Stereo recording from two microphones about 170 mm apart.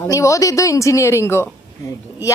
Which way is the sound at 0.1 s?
20° left (ahead or behind).